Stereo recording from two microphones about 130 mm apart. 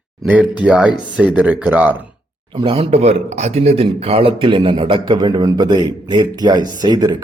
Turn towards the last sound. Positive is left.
turn(degrees=-30)  # may be behind; listen again after turning